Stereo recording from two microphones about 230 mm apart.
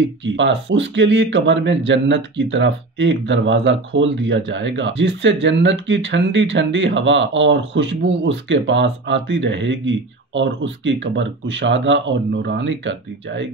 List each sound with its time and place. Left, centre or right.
0.2 s speech: right